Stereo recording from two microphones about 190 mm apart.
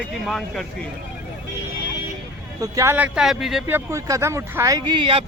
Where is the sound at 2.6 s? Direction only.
15° right (ahead or behind).